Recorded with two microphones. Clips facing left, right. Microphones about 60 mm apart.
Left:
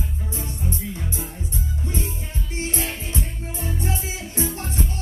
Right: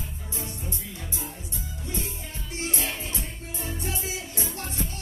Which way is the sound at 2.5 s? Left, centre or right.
Left.